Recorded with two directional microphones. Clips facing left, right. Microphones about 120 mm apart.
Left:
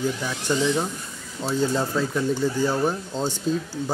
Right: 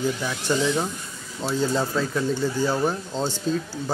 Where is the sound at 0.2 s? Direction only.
5° right (ahead or behind).